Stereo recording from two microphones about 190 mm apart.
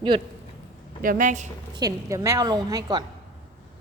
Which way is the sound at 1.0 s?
45° right (ahead or behind).